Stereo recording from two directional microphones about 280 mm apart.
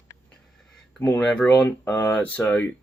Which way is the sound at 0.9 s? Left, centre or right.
Centre.